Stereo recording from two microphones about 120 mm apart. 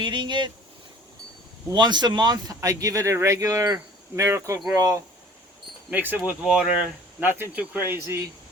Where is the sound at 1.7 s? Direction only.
35° right (ahead or behind).